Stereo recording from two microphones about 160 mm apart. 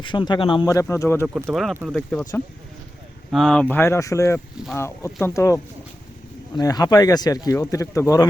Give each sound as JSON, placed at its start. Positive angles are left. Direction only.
{"t": 0.0, "sound": "speech", "side_deg": 30}
{"t": 0.7, "sound": "speech", "side_deg": 20}
{"t": 1.5, "sound": "speech", "side_deg": 0}
{"t": 6.6, "sound": "speech", "side_deg": 25}